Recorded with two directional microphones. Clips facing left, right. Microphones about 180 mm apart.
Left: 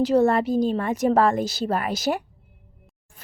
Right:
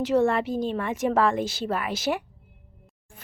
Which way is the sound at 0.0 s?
35° left (ahead or behind).